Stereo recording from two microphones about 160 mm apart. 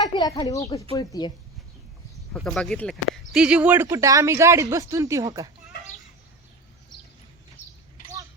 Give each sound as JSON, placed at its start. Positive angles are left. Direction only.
{"t": 0.0, "sound": "speech", "side_deg": 25}
{"t": 2.3, "sound": "speech", "side_deg": 0}
{"t": 3.3, "sound": "speech", "side_deg": -5}
{"t": 3.8, "sound": "speech", "side_deg": -20}